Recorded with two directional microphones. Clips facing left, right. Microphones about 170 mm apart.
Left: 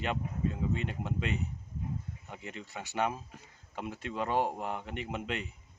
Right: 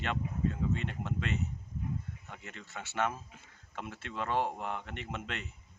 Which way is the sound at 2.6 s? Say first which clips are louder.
Left 1 dB; 15° left (ahead or behind).